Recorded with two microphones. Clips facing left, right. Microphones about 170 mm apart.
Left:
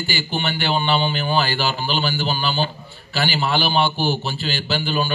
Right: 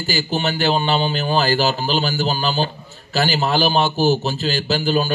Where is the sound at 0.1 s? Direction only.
40° right (ahead or behind).